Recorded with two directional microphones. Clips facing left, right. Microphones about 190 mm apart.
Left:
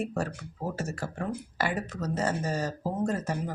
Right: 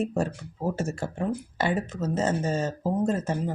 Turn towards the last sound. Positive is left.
turn(degrees=-25)  # may be behind; listen again after turning